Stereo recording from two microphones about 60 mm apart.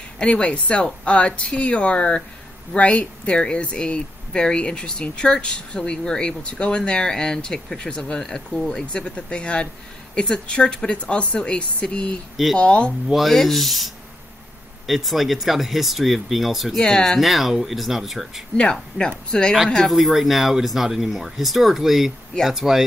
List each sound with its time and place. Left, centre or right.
0.2 s speech: centre
13.1 s speech: centre
18.6 s speech: centre
19.5 s speech: centre